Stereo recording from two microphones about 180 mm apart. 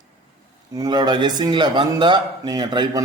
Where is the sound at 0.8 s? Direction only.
25° right (ahead or behind).